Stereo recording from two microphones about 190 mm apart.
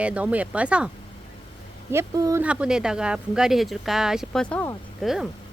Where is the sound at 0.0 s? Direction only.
5° right (ahead or behind).